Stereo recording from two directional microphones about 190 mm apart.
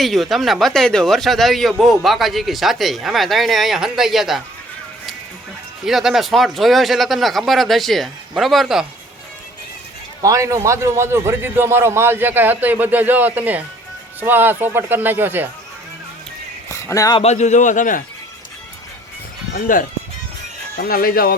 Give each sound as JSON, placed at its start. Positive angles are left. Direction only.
{"t": 0.0, "sound": "a man's voice", "side_deg": 0}
{"t": 5.8, "sound": "a man's voice", "side_deg": 0}
{"t": 10.2, "sound": "a man's voice", "side_deg": -15}
{"t": 16.6, "sound": "speech", "side_deg": 15}
{"t": 17.2, "sound": "speech", "side_deg": 35}
{"t": 19.5, "sound": "speech", "side_deg": 45}